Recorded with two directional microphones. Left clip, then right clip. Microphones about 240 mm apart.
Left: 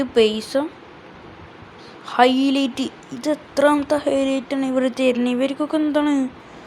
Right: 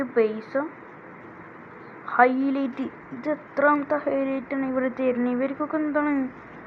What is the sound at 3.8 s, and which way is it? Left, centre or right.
A woman's voice, left.